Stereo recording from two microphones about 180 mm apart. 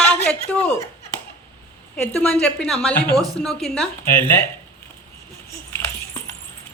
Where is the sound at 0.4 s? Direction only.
10° left (ahead or behind).